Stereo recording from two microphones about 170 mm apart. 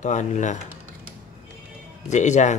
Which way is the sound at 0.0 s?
45° left (ahead or behind).